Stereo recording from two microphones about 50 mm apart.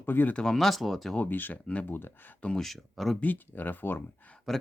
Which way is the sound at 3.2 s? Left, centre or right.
Left.